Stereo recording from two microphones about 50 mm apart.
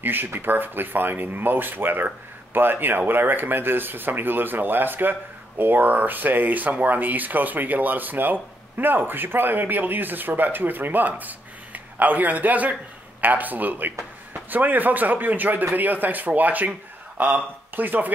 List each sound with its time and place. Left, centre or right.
0.0 s speech: right